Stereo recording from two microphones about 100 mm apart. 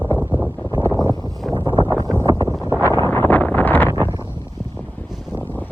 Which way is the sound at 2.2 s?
35° right (ahead or behind).